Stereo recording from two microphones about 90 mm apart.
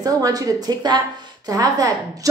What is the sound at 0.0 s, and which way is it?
Speech, 45° right (ahead or behind).